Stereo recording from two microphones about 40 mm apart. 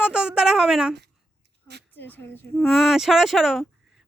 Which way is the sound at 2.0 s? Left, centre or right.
Left.